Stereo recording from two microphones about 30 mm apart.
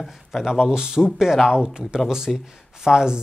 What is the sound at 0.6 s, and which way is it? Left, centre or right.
Speech, right.